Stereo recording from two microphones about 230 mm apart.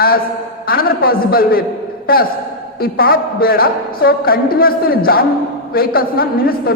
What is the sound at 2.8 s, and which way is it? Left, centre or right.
A man's voice, left.